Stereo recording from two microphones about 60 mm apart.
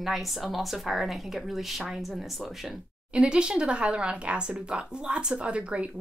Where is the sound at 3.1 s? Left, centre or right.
Centre.